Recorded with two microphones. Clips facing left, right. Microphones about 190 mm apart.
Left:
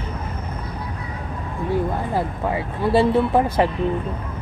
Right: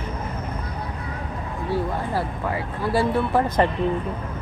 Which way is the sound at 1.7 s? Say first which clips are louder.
Left 2 dB; 20° left (ahead or behind).